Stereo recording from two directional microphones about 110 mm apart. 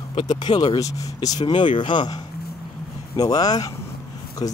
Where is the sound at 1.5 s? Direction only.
50° left (ahead or behind).